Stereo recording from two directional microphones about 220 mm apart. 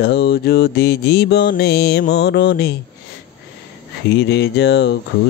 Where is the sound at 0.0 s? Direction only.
50° left (ahead or behind).